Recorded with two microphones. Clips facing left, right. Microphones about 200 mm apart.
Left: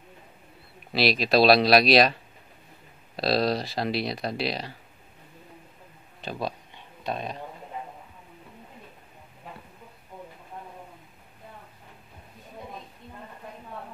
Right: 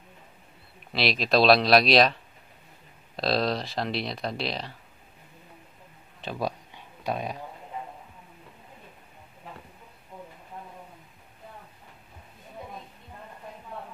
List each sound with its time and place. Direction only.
0.9 s speech: 5° left (ahead or behind)
3.2 s speech: 5° left (ahead or behind)
7.0 s speech: 10° right (ahead or behind)